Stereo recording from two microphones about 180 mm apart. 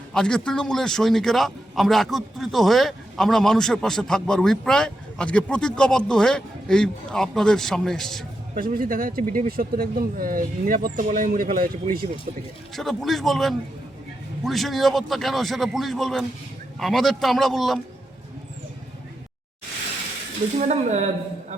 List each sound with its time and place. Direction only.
0.1 s a man's voice: 5° left (ahead or behind)
8.5 s speech: 50° right (ahead or behind)
12.7 s a man's voice: centre (ahead or behind)
20.6 s speech: 40° right (ahead or behind)